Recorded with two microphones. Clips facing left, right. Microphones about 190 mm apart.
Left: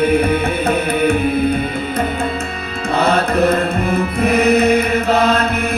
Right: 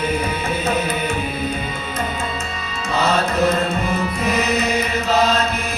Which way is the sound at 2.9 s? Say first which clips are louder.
Left 4 dB; 60° left (ahead or behind).